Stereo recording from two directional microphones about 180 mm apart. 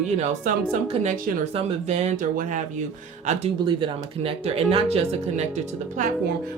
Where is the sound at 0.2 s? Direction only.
40° right (ahead or behind).